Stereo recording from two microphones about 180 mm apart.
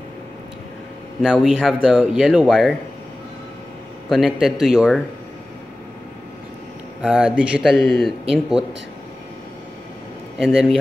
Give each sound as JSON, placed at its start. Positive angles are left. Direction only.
{"t": 1.2, "sound": "a man's voice", "side_deg": 0}
{"t": 4.1, "sound": "a man's voice", "side_deg": 0}
{"t": 7.0, "sound": "a man's voice", "side_deg": -5}
{"t": 10.3, "sound": "speech", "side_deg": -5}